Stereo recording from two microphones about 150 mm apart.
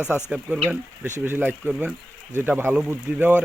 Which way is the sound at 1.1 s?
15° right (ahead or behind).